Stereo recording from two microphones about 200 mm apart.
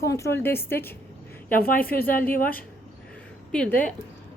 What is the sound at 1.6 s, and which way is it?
Speech, 45° left (ahead or behind).